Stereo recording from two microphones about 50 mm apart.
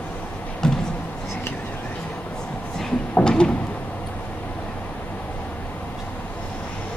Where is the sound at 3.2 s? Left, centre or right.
Centre.